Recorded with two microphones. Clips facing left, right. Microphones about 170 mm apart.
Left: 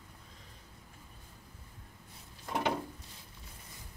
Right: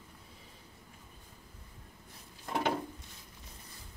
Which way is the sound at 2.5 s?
5° right (ahead or behind).